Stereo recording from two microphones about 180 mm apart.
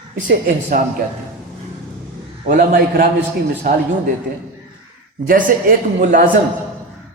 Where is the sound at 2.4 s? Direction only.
55° right (ahead or behind).